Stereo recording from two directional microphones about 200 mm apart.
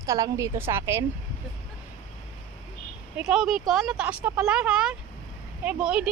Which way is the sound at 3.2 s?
Centre (ahead or behind).